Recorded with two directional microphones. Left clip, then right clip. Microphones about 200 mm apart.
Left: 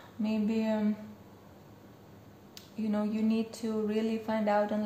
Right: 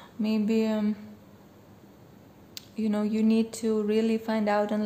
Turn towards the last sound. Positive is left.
turn(degrees=-40)  # may be behind; listen again after turning